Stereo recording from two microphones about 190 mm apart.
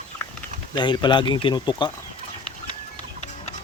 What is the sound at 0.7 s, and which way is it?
Speech, 25° left (ahead or behind).